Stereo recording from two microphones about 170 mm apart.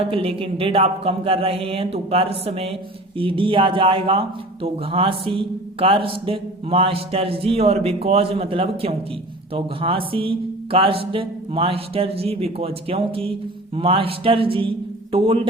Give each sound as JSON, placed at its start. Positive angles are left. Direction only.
{"t": 0.0, "sound": "a man's voice", "side_deg": -35}